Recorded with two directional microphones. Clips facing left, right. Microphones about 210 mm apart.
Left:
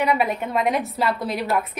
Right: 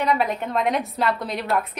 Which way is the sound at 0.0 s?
10° left (ahead or behind).